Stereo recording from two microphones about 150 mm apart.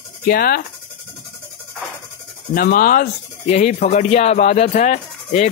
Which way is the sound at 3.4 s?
50° left (ahead or behind).